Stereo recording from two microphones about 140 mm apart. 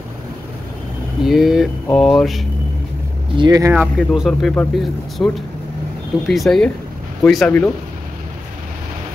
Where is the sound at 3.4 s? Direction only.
30° right (ahead or behind).